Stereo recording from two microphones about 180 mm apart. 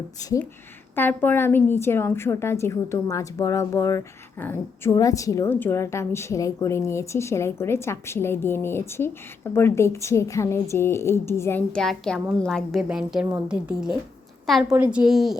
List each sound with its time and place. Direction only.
0.2 s a woman's voice: 20° left (ahead or behind); by 15.4 s centre (ahead or behind)